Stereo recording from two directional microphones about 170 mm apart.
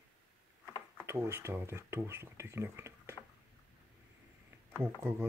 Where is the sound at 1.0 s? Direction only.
15° right (ahead or behind).